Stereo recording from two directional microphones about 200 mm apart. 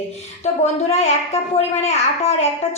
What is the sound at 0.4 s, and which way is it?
A child's voice, 35° left (ahead or behind).